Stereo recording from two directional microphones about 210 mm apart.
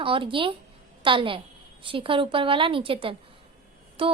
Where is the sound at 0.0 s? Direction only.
25° right (ahead or behind).